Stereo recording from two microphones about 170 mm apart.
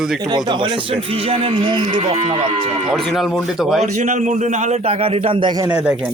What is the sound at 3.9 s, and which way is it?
A man's voice, 45° right (ahead or behind).